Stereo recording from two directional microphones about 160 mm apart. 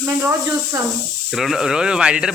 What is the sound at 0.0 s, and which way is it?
Speech, 10° right (ahead or behind).